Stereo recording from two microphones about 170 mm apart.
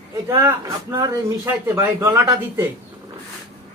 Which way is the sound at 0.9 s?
15° right (ahead or behind).